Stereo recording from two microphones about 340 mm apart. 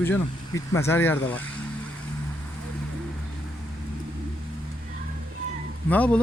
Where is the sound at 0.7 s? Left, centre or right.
Centre.